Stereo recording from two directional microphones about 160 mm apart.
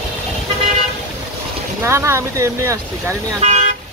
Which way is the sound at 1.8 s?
15° right (ahead or behind).